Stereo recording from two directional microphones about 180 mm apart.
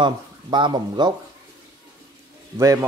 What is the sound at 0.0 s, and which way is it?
Speech, 25° right (ahead or behind).